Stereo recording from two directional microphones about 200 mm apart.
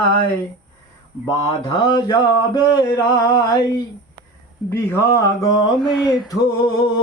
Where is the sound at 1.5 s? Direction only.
25° left (ahead or behind).